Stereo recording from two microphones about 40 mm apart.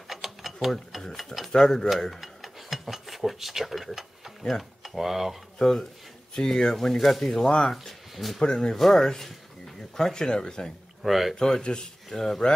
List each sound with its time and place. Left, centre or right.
0.1 s mechanisms: centre
1.1 s stir: centre
1.5 s speech: centre
2.1 s cutlery: centre
4.4 s speech: centre
5.6 s speech: centre
7.7 s speech: centre
8.4 s speech: left
8.7 s speech: centre
11.0 s speech: centre
11.3 s speech: centre